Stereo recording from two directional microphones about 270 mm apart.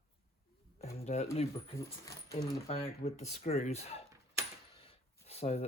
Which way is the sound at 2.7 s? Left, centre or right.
Left.